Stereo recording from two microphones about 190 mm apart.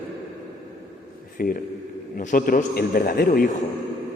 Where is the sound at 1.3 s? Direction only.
50° left (ahead or behind).